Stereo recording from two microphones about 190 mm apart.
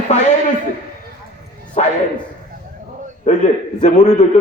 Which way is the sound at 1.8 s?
40° left (ahead or behind).